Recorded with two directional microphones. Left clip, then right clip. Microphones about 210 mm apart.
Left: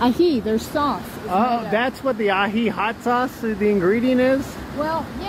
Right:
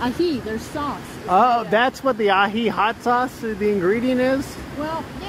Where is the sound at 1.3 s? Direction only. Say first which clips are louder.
Right 4 dB; 30° right (ahead or behind).